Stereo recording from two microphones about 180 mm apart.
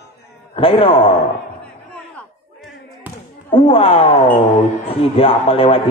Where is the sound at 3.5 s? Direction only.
30° left (ahead or behind).